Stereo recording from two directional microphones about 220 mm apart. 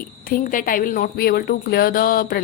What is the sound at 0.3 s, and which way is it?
Speech, 40° left (ahead or behind).